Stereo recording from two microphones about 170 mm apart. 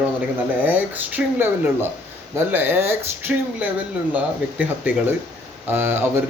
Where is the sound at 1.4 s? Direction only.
10° right (ahead or behind).